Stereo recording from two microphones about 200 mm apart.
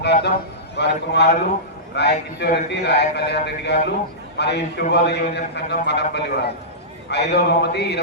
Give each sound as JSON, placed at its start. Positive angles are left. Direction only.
{"t": 0.0, "sound": "a man's voice", "side_deg": 55}